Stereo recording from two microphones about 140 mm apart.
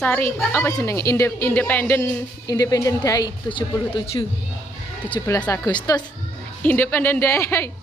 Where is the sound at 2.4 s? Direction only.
25° left (ahead or behind).